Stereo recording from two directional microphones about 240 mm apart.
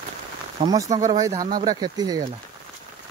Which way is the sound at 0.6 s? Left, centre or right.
Centre.